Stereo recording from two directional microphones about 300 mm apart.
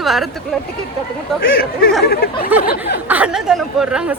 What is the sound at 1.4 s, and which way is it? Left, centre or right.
Speech, left.